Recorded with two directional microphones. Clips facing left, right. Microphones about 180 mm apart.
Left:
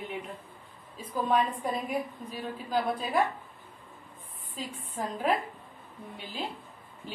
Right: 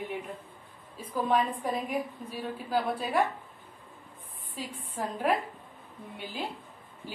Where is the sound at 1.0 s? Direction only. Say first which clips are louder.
Even; 10° right (ahead or behind).